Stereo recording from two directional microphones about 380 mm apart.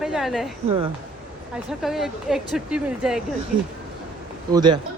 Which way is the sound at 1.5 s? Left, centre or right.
Centre.